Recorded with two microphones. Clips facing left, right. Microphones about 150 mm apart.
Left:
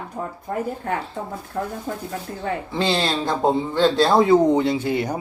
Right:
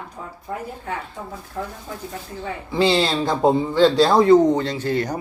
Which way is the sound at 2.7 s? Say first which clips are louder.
Right 5 dB; 5° right (ahead or behind).